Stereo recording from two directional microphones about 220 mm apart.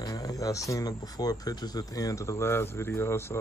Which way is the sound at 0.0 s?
15° left (ahead or behind).